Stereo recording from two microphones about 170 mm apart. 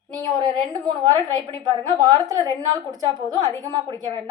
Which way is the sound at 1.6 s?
25° right (ahead or behind).